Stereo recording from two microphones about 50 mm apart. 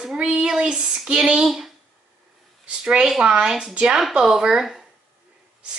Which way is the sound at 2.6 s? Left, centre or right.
Right.